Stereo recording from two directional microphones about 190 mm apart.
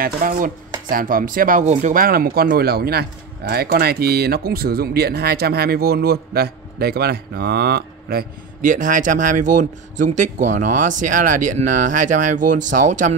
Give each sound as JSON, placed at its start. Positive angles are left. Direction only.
{"t": 0.0, "sound": "speech", "side_deg": -50}